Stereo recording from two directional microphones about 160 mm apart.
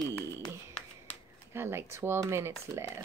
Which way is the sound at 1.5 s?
15° right (ahead or behind).